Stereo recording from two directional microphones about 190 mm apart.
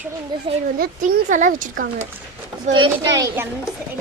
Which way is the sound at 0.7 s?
45° right (ahead or behind).